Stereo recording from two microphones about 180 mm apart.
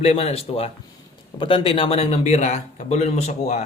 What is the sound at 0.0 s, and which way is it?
A man's voice, 35° left (ahead or behind).